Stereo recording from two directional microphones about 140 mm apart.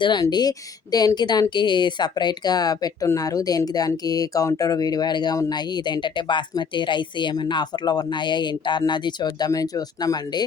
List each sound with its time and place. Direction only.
0.0 s a woman's voice: 30° left (ahead or behind)